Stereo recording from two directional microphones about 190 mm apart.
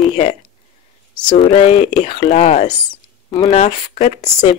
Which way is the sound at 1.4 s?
35° left (ahead or behind).